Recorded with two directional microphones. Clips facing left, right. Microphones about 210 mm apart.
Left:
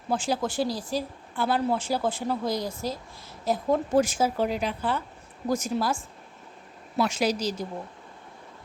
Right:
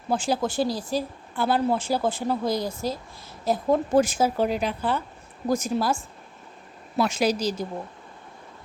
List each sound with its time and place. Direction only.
0.1 s speech: 35° right (ahead or behind)